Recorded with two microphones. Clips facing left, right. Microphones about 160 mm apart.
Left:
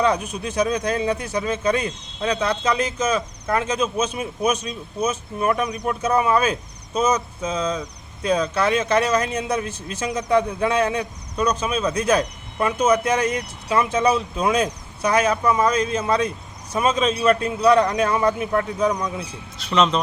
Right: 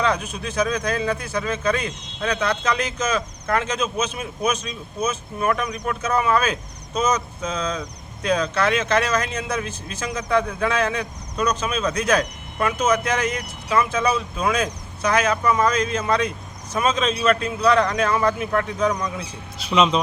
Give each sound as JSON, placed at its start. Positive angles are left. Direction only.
{"t": 0.0, "sound": "a man's voice", "side_deg": 10}